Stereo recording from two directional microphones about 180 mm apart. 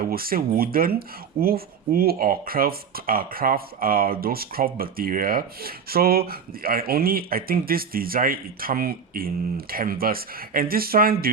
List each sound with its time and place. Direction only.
0.0 s speech: 55° right (ahead or behind)